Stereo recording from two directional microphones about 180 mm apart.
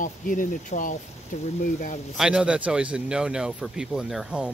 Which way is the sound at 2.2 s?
5° right (ahead or behind).